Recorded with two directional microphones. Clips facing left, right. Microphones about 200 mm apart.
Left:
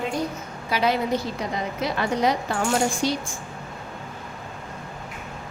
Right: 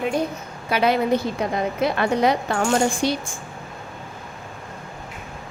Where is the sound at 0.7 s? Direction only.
60° right (ahead or behind).